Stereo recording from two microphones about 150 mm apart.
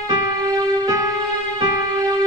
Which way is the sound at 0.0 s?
25° right (ahead or behind).